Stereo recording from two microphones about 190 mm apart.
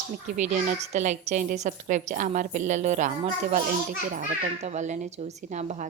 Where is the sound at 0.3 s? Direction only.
40° right (ahead or behind).